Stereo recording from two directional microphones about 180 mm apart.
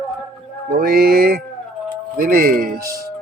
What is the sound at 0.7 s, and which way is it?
A man's voice, 55° right (ahead or behind).